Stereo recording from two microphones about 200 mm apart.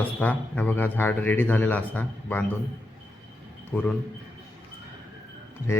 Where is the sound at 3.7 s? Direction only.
5° left (ahead or behind).